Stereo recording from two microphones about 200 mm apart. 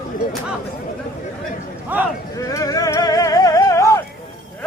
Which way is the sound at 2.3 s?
15° left (ahead or behind).